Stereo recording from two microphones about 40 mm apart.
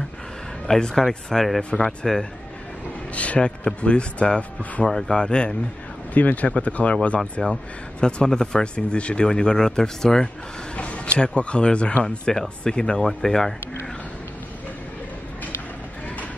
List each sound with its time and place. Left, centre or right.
0.7 s speech: centre
1.0 s speech: centre
1.6 s speech: left
3.2 s speech: left
4.8 s speech: centre
6.1 s speech: left
7.4 s speech: centre
8.9 s speech: left
11.1 s speech: left
13.0 s speech: centre